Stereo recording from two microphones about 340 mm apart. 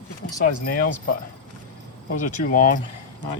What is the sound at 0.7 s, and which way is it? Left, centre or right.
Speech, left.